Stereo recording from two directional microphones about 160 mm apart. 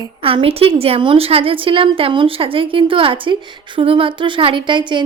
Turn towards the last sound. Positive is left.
turn(degrees=-30)  # may be behind; listen again after turning